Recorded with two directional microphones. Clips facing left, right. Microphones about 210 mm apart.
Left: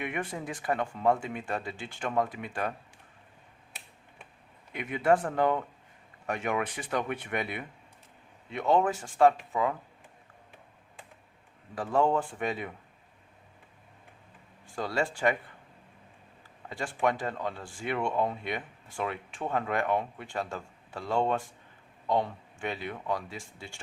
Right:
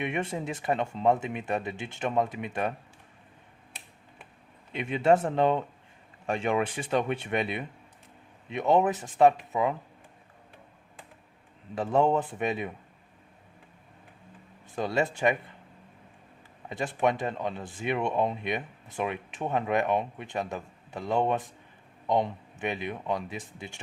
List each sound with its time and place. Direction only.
0.0 s speech: 25° right (ahead or behind)
4.7 s speech: 25° right (ahead or behind)
11.7 s speech: 20° right (ahead or behind)
14.8 s speech: 20° right (ahead or behind)
16.6 s speech: 20° right (ahead or behind)